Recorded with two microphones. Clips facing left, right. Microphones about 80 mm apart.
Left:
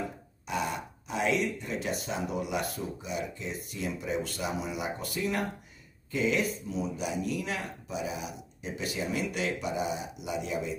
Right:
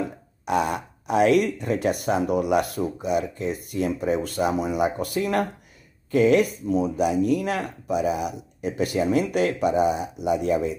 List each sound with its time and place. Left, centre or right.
0.5 s speech: right